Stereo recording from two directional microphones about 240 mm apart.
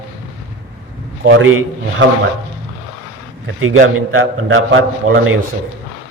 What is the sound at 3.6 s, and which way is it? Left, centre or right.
A man's voice, right.